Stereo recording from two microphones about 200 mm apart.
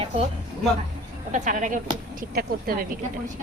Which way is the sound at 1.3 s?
40° right (ahead or behind).